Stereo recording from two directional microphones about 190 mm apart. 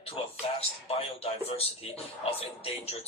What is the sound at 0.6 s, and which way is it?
Speech, 30° left (ahead or behind).